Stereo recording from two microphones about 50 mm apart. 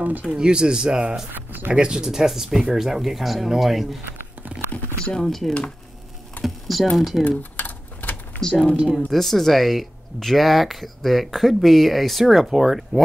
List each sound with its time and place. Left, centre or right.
0.3 s speech: centre
1.3 s speech: right
1.7 s speech: centre
5.0 s speech: centre
6.4 s speech: centre
7.2 s a sound: left
8.4 s speech: centre
8.8 s speech: centre